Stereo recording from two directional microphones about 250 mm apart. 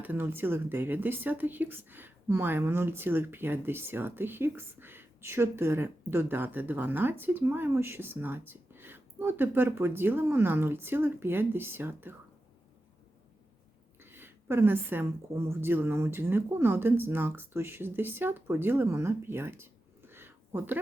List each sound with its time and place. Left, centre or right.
0.0 s speech: centre
14.0 s speech: centre